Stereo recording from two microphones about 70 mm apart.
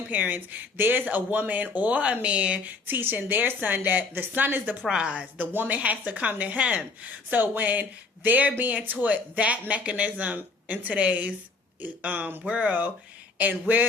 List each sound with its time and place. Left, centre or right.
0.1 s speech: right
4.9 s a woman's voice: centre